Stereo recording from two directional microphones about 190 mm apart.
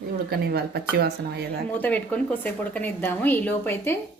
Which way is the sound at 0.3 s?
55° right (ahead or behind).